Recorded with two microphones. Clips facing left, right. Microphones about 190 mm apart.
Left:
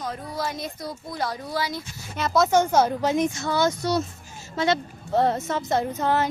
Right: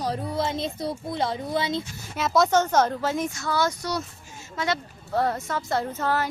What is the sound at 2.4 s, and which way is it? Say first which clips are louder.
Speech: left 1 dB; 10° left (ahead or behind).